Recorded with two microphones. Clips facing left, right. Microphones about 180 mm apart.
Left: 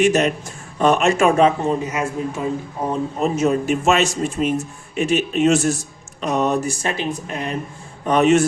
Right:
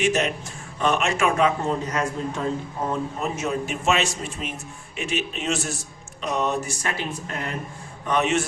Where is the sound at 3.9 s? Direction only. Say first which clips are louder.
Left 4 dB; 45° left (ahead or behind).